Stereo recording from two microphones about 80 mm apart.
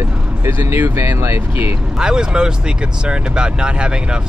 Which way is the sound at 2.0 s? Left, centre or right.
Centre.